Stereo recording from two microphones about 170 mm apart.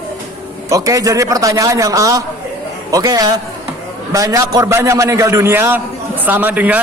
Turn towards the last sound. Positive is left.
turn(degrees=-10)  # may be behind; listen again after turning